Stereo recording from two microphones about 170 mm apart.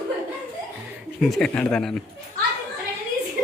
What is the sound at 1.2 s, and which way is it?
Speech, centre (ahead or behind).